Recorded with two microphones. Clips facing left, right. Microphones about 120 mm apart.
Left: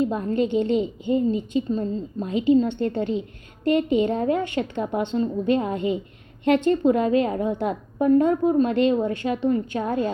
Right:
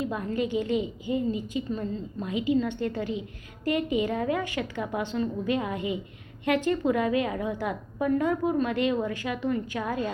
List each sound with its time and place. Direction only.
0.0 s a woman's voice: 35° left (ahead or behind)